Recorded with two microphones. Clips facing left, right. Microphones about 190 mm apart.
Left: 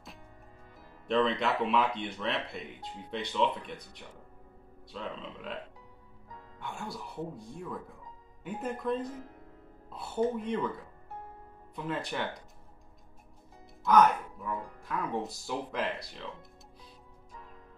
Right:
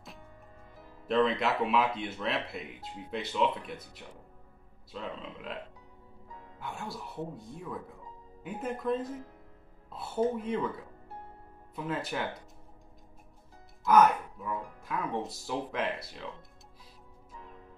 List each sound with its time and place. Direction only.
1.0 s speech: 5° right (ahead or behind)
6.6 s speech: centre (ahead or behind)
11.7 s speech: centre (ahead or behind)
13.8 s speech: centre (ahead or behind)